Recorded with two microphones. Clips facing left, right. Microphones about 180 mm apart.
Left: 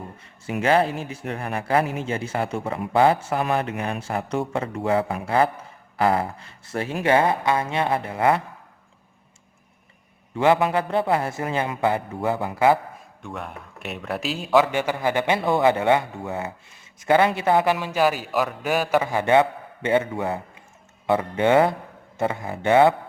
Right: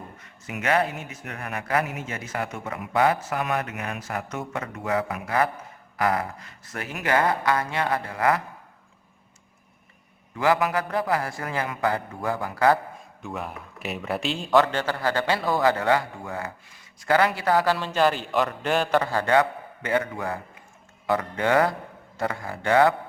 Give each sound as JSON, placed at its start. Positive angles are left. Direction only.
{"t": 0.2, "sound": "speech", "side_deg": 30}
{"t": 10.3, "sound": "speech", "side_deg": 25}
{"t": 13.2, "sound": "a man's voice", "side_deg": 0}